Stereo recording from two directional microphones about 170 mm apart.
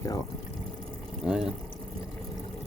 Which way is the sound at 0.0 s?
20° left (ahead or behind).